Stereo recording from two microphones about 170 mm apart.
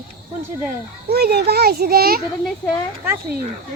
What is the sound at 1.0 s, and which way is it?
Speech, 70° right (ahead or behind).